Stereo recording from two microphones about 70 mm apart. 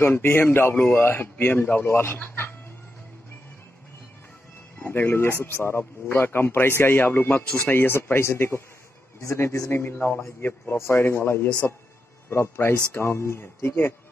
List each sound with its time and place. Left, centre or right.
0.0 s speech: left
4.8 s speech: left